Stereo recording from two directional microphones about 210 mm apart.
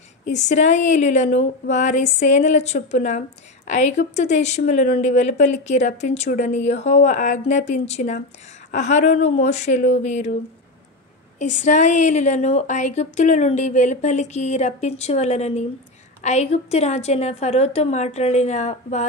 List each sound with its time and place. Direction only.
0.2 s speech: 35° left (ahead or behind)
11.3 s speech: 35° left (ahead or behind)